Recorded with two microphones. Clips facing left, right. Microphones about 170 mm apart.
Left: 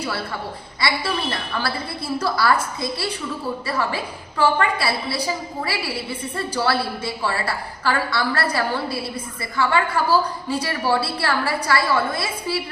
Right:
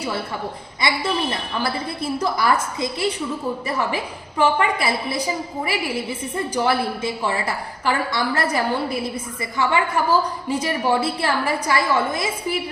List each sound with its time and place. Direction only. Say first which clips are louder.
0.8 s a woman's voice: right 2 dB; 20° right (ahead or behind)